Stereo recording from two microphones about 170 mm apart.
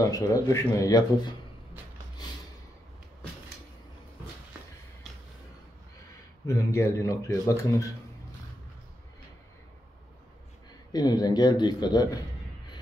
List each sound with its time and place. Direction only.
0.0 s speech: 20° left (ahead or behind)
6.4 s speech: 15° left (ahead or behind)
10.9 s speech: 25° left (ahead or behind)